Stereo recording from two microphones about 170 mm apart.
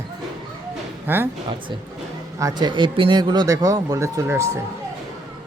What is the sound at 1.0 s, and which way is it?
Speech, 10° right (ahead or behind).